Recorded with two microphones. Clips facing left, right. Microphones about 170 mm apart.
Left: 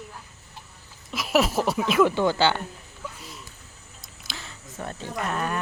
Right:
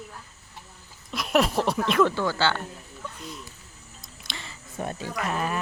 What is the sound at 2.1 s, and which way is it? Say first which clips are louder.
Speech: left 4 dB; 20° left (ahead or behind).